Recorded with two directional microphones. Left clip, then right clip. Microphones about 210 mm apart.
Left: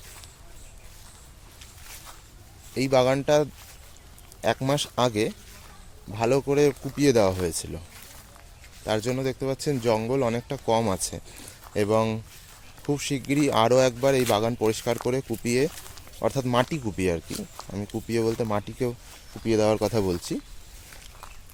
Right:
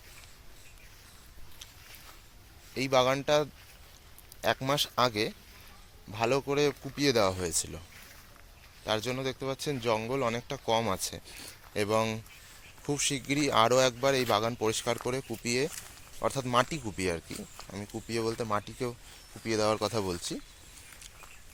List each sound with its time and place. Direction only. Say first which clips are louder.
2.7 s speech: left 5 dB; 10° left (ahead or behind)
8.9 s speech: left 5 dB; 15° left (ahead or behind)
17.3 s speech: left 6 dB; centre (ahead or behind)
18.5 s speech: left 4 dB; 15° left (ahead or behind)